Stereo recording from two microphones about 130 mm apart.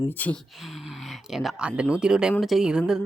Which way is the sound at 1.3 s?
Centre (ahead or behind).